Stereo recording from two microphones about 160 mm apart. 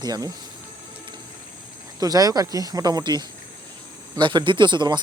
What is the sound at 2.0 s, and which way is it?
Speech, 20° right (ahead or behind).